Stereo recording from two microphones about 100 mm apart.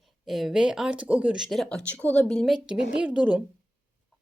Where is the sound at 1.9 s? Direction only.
15° left (ahead or behind).